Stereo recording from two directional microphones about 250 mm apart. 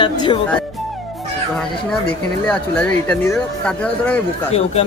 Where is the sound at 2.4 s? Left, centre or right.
Centre.